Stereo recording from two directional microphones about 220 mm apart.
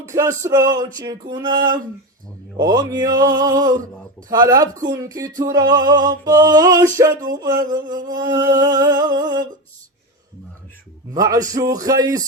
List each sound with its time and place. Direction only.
0.1 s speech: 15° right (ahead or behind)
0.9 s a sound: 15° right (ahead or behind)
2.6 s speech: 20° right (ahead or behind)
11.1 s speech: 15° right (ahead or behind)